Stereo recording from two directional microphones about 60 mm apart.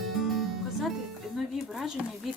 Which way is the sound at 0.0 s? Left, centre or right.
Centre.